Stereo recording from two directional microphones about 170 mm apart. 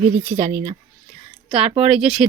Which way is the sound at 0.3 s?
45° right (ahead or behind).